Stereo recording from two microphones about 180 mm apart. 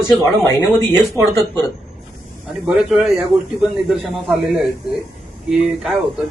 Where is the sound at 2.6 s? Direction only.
Centre (ahead or behind).